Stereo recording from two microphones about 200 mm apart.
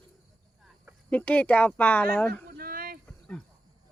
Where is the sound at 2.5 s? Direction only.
45° right (ahead or behind).